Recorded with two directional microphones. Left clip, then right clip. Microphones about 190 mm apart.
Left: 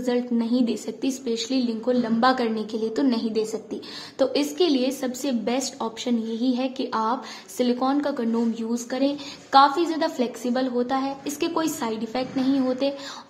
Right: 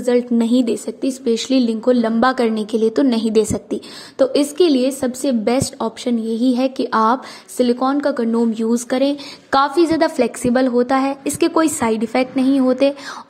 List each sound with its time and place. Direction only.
0.0 s a woman's voice: 35° right (ahead or behind)
4.2 s a woman's voice: 30° right (ahead or behind)